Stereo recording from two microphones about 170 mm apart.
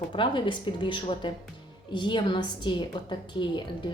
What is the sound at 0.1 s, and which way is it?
A woman's voice, 30° left (ahead or behind).